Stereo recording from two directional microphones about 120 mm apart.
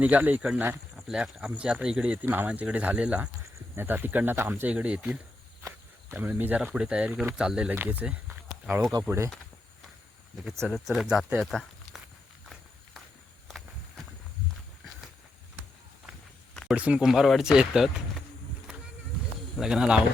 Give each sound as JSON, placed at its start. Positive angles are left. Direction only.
{"t": 0.0, "sound": "speech", "side_deg": -15}
{"t": 0.9, "sound": "speech", "side_deg": -5}
{"t": 5.6, "sound": "cricket", "side_deg": -25}
{"t": 6.2, "sound": "speech", "side_deg": -15}
{"t": 10.6, "sound": "speech", "side_deg": 0}
{"t": 16.6, "sound": "speech", "side_deg": -10}
{"t": 19.5, "sound": "speech", "side_deg": -5}